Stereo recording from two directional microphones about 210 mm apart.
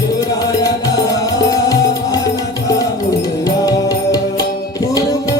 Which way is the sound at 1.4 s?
15° left (ahead or behind).